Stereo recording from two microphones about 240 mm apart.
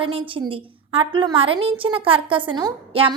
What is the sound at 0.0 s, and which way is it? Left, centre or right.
A woman's voice, right.